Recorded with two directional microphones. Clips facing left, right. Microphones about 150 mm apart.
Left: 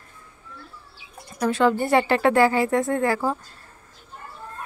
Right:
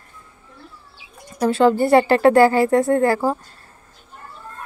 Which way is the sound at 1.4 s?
35° right (ahead or behind).